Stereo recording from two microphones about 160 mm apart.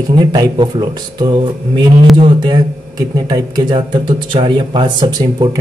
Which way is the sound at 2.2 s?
30° right (ahead or behind).